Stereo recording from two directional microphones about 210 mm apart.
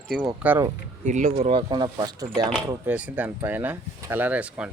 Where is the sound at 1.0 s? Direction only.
35° right (ahead or behind); by 2.2 s 20° right (ahead or behind).